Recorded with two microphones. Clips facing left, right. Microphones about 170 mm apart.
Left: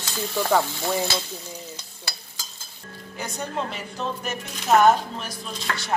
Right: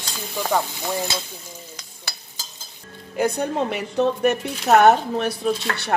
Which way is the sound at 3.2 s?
55° right (ahead or behind).